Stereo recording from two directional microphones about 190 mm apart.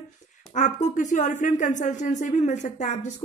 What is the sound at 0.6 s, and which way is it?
Speech, 40° left (ahead or behind).